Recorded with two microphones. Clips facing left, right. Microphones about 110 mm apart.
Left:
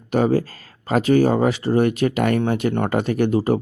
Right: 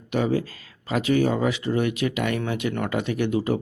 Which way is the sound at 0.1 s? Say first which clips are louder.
Left 5 dB; 40° left (ahead or behind).